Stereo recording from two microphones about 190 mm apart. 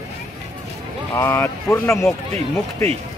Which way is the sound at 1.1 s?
10° left (ahead or behind).